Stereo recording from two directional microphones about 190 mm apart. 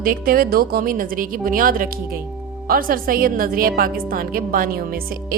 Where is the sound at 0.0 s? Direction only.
50° right (ahead or behind).